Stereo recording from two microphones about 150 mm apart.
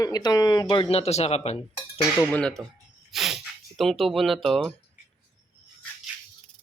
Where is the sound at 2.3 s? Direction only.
5° left (ahead or behind).